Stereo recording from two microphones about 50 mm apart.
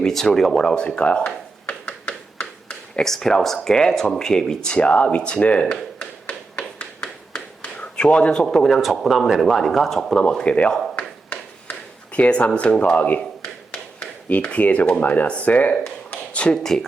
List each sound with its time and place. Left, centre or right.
0.0 s speech: centre
0.6 s speech: centre
1.9 s a sound: left
3.0 s speech: centre
4.8 s speech: left
6.0 s tap: left
8.4 s speech: centre; by 13.2 s left
14.3 s speech: left